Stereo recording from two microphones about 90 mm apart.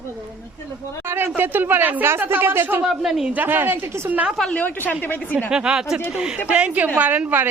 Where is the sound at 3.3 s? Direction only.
20° right (ahead or behind).